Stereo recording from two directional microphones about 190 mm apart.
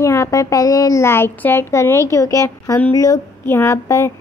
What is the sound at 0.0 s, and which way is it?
A child's voice, 15° left (ahead or behind).